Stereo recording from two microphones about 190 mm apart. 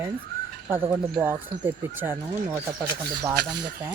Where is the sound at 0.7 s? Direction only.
10° right (ahead or behind).